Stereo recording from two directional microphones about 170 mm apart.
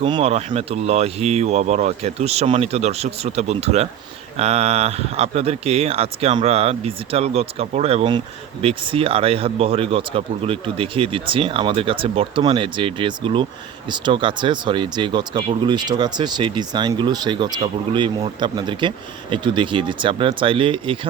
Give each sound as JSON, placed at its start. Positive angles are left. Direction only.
{"t": 0.0, "sound": "speech", "side_deg": -35}